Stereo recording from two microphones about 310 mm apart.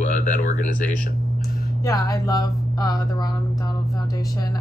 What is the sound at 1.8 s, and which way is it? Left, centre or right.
Speech, centre.